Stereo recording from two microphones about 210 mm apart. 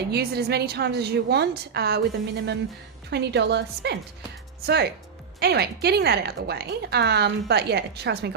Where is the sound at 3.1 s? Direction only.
55° right (ahead or behind).